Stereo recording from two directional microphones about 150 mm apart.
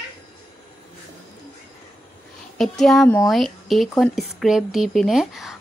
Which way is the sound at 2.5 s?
Centre (ahead or behind).